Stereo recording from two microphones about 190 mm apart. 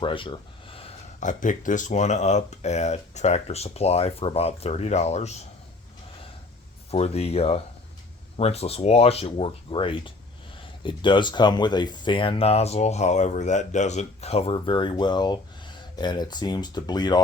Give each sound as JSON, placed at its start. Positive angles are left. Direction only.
{"t": 0.0, "sound": "speech", "side_deg": 25}
{"t": 6.9, "sound": "speech", "side_deg": 35}